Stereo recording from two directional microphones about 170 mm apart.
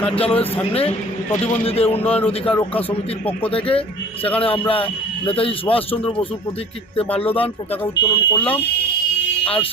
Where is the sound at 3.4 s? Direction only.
30° left (ahead or behind).